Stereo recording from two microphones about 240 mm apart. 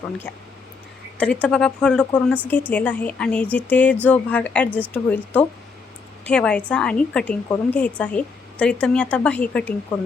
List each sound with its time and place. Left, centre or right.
1.2 s a woman's voice: centre